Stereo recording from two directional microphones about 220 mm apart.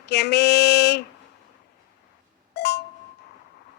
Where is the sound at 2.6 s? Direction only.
50° left (ahead or behind).